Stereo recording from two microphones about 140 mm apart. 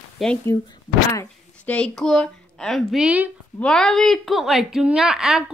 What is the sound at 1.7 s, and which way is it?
A woman's voice, 5° left (ahead or behind).